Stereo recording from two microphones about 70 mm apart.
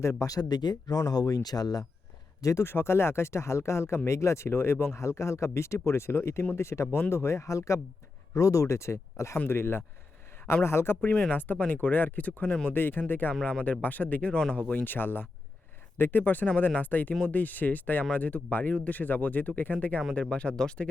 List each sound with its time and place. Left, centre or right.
0.0 s speech: left
0.9 s speech: left
2.4 s speech: left
2.6 s speech: left
4.9 s speech: left
6.8 s speech: left
7.1 s speech: left
11.1 s speech: centre
12.7 s speech: left
13.4 s speech: centre
14.7 s speech: left